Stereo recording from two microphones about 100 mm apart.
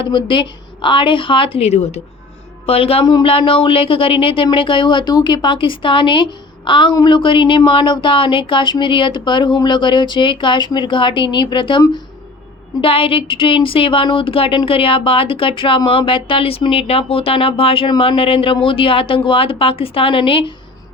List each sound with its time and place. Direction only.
0.3 s speech: 55° left (ahead or behind); by 2.0 s 90° left
2.6 s speech: 80° left
3.0 s speech: 45° left (ahead or behind)
3.2 s speech: 65° left (ahead or behind)
12.8 s speech: 65° left (ahead or behind)